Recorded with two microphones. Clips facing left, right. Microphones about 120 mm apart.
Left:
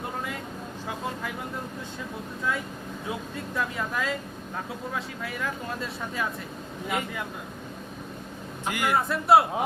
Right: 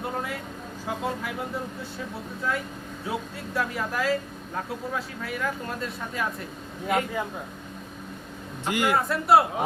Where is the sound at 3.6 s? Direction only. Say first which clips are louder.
Right 2 dB; 5° right (ahead or behind).